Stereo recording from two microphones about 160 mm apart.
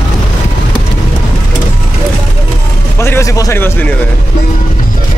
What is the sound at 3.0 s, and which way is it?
Speech, 15° left (ahead or behind).